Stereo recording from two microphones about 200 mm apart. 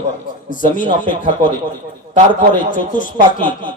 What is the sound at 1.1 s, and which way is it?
Speech, 40° left (ahead or behind).